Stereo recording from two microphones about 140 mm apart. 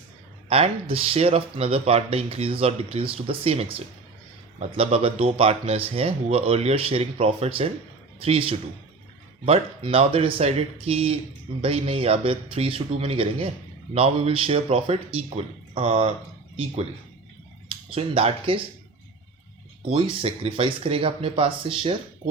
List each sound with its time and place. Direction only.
0.4 s speech: 45° right (ahead or behind)
17.7 s speech: 40° right (ahead or behind)
19.9 s speech: 45° right (ahead or behind)